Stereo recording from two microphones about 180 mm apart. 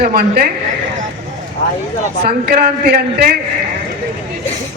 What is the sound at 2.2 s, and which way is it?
Speech, 60° right (ahead or behind).